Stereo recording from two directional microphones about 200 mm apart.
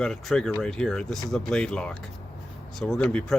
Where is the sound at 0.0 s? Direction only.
5° left (ahead or behind).